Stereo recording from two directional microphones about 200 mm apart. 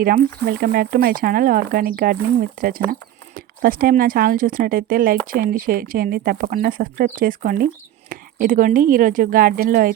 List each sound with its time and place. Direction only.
0.0 s speech: 50° right (ahead or behind)